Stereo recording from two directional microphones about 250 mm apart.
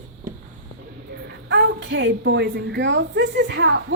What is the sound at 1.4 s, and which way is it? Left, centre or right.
A woman's voice, right.